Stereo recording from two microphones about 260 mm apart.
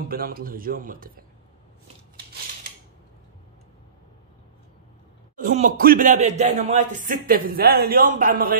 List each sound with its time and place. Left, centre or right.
0.1 s speech: right
5.3 s speech: right